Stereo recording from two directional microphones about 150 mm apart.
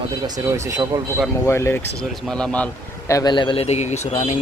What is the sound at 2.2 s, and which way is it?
Speech, 5° left (ahead or behind).